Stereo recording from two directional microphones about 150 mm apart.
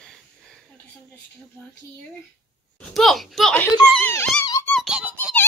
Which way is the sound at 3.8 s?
10° left (ahead or behind).